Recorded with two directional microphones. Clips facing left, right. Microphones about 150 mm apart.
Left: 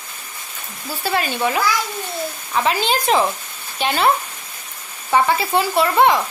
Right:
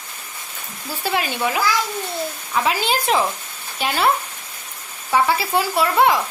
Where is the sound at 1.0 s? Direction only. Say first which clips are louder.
Left 1 dB; 15° right (ahead or behind).